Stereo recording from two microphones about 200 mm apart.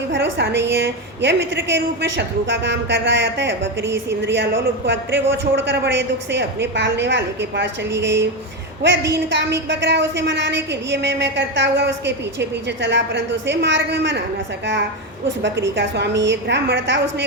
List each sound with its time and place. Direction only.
0.1 s a woman's voice: 60° right (ahead or behind)
15.4 s a woman's voice: 65° right (ahead or behind)